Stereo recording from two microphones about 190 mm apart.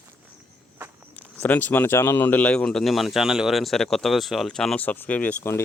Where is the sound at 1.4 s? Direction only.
10° left (ahead or behind).